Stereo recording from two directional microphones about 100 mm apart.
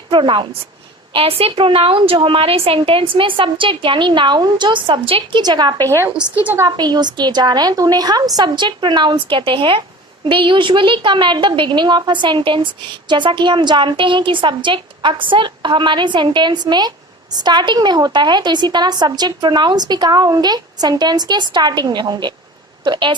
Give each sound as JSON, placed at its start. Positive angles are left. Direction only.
{"t": 0.1, "sound": "a woman's voice", "side_deg": -55}
{"t": 1.1, "sound": "a woman's voice", "side_deg": -75}
{"t": 5.4, "sound": "a woman's voice", "side_deg": -45}
{"t": 6.1, "sound": "a woman's voice", "side_deg": -15}
{"t": 6.6, "sound": "a woman's voice", "side_deg": -40}